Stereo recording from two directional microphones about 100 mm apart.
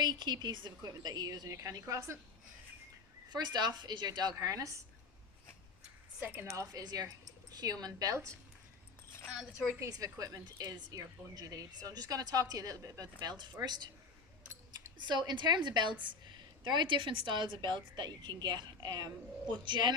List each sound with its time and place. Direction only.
0.0 s a woman's voice: 45° right (ahead or behind)
3.2 s a woman's voice: 45° right (ahead or behind)
6.4 s a woman's voice: 30° right (ahead or behind)
9.8 s a woman's voice: 35° right (ahead or behind)